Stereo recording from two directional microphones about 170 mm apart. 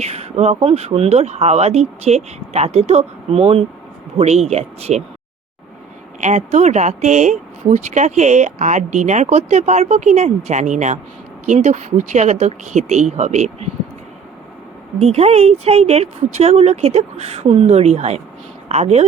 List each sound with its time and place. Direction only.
0.0 s speech: 40° right (ahead or behind)
6.1 s speech: 40° right (ahead or behind)
14.9 s speech: 40° right (ahead or behind)